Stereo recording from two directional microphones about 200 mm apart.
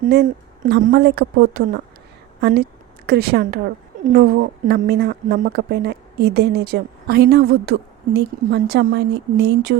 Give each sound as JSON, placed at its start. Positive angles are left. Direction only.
{"t": 0.0, "sound": "a woman's voice", "side_deg": -45}